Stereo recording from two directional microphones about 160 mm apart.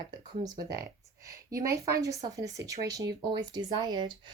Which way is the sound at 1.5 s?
20° right (ahead or behind).